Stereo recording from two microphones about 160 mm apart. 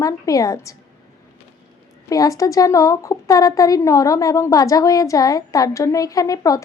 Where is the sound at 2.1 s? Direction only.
20° left (ahead or behind).